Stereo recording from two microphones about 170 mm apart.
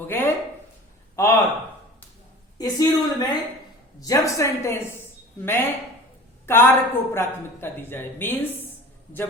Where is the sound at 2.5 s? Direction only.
20° left (ahead or behind).